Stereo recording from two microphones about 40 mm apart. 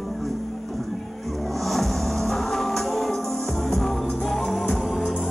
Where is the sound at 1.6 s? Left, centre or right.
Centre.